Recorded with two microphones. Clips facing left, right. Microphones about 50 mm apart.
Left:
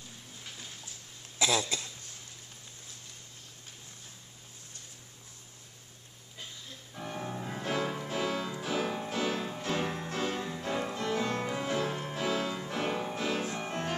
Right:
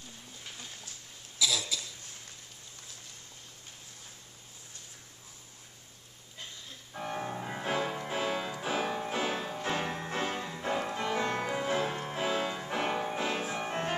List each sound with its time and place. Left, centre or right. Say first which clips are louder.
1.4 s speech: left 3 dB; left
6.9 s music: right 2 dB; centre
9.1 s music: even; centre